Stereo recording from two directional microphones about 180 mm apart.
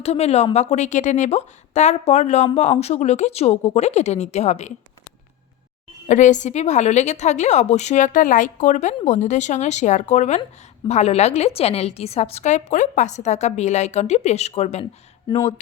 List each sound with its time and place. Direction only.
0.0 s a woman's voice: 35° left (ahead or behind)
6.1 s a woman's voice: 45° left (ahead or behind)
15.3 s speech: 25° left (ahead or behind)